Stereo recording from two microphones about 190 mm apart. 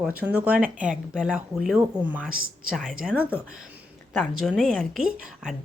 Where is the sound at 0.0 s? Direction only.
10° right (ahead or behind).